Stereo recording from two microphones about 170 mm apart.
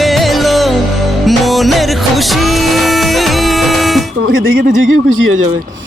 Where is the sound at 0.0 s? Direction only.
Centre (ahead or behind).